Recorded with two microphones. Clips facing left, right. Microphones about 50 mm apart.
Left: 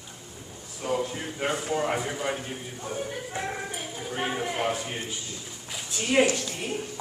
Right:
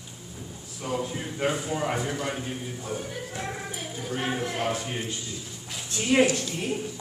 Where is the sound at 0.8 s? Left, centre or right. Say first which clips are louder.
Left 2 dB; centre.